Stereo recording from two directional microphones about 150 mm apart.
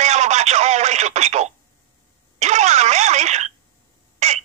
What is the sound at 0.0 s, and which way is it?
Radio, 50° right (ahead or behind).